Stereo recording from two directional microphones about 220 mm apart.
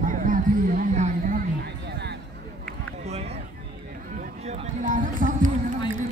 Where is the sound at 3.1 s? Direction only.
30° right (ahead or behind).